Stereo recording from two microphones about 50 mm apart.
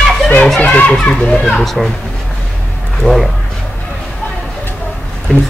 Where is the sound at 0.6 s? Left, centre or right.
Left.